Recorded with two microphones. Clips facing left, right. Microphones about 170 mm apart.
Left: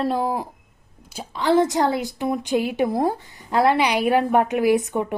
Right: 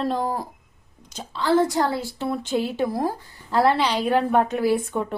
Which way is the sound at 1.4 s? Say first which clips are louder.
Left 2 dB; 20° left (ahead or behind).